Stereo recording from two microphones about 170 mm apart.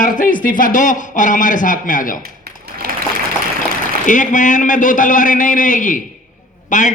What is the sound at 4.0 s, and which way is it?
A man's voice, 50° left (ahead or behind).